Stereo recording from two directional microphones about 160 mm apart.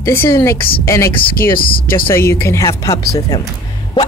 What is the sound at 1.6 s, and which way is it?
Speech, 65° left (ahead or behind).